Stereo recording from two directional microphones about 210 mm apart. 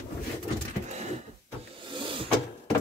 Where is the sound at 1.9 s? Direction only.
25° right (ahead or behind).